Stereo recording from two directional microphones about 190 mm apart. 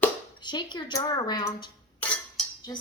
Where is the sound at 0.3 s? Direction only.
25° left (ahead or behind).